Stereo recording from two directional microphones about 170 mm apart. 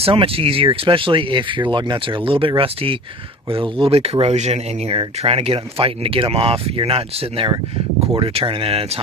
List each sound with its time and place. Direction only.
0.0 s speech: 30° right (ahead or behind)